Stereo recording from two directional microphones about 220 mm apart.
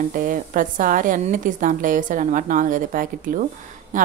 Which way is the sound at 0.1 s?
40° right (ahead or behind).